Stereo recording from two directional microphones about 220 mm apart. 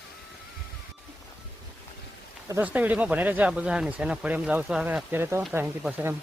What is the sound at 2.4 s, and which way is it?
Speech, 10° right (ahead or behind).